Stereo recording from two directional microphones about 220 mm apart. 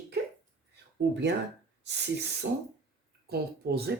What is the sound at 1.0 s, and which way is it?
Speech, 50° right (ahead or behind).